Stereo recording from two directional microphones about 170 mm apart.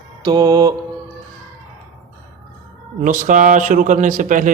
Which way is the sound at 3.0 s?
50° right (ahead or behind).